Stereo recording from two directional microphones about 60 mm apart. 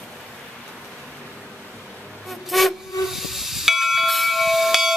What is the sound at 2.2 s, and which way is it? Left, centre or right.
Hiss, centre.